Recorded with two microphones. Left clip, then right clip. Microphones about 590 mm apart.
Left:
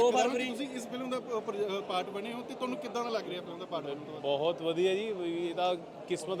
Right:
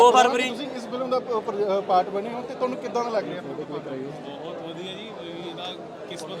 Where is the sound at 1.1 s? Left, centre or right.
Centre.